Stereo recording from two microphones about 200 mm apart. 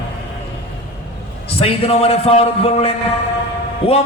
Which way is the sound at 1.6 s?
30° left (ahead or behind).